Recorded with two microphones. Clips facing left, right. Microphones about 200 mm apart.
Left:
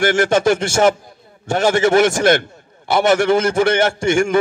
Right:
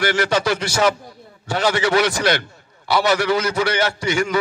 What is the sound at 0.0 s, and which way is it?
A man's voice, 50° left (ahead or behind).